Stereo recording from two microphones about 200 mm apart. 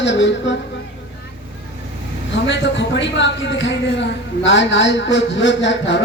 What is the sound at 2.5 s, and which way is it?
A man's voice, 65° left (ahead or behind).